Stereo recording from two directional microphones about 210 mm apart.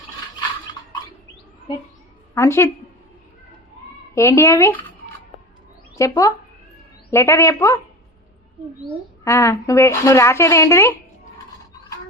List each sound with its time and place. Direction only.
2.3 s speech: 15° left (ahead or behind)
4.1 s speech: 15° left (ahead or behind)
6.0 s speech: 15° left (ahead or behind)
9.2 s speech: 15° left (ahead or behind)